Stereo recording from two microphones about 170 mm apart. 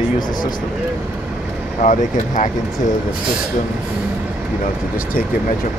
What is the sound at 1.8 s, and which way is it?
Speech, 50° left (ahead or behind).